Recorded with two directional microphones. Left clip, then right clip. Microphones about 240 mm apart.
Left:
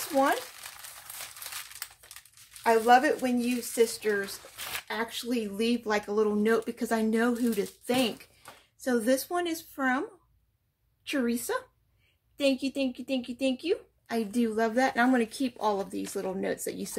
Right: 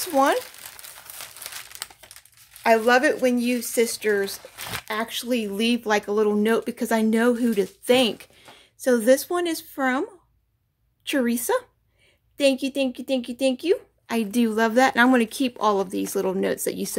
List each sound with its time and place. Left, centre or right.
2.6 s a woman's voice: right
11.1 s a woman's voice: right